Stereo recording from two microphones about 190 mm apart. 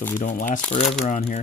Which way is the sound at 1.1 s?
40° left (ahead or behind).